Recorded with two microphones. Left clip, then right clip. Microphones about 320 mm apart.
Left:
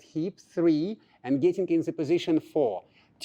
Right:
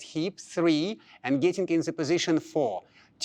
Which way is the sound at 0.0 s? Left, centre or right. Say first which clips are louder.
Right 1 dB; right.